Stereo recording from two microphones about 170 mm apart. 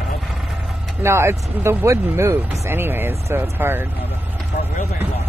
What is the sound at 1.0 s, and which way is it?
Speech, 15° right (ahead or behind).